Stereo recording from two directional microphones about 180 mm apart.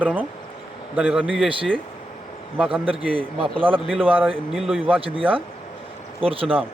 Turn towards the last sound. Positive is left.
turn(degrees=-30)  # may be behind; listen again after turning